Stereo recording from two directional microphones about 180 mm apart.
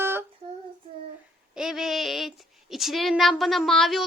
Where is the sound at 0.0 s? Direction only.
15° right (ahead or behind).